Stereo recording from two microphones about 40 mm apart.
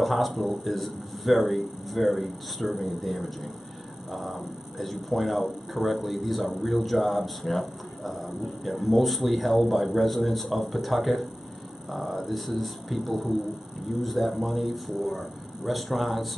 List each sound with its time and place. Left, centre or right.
0.0 s speech: centre